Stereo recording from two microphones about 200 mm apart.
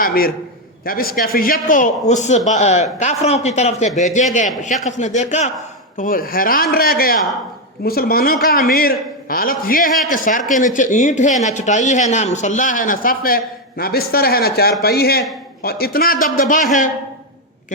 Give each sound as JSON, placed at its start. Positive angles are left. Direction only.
{"t": 0.0, "sound": "a man's voice", "side_deg": 50}